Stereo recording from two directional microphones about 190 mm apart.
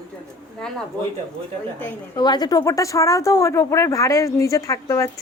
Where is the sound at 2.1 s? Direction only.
20° left (ahead or behind).